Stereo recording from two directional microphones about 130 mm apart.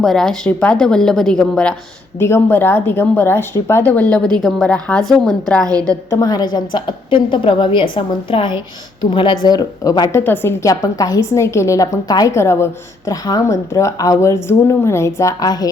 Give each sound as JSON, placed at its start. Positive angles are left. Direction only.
{"t": 0.0, "sound": "speech", "side_deg": 5}
{"t": 2.1, "sound": "a woman's voice", "side_deg": 20}
{"t": 6.1, "sound": "a woman's voice", "side_deg": 25}
{"t": 10.1, "sound": "a woman's voice", "side_deg": 20}